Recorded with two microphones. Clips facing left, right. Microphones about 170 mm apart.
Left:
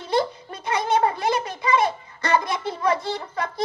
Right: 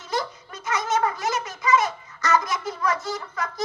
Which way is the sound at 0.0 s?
30° left (ahead or behind).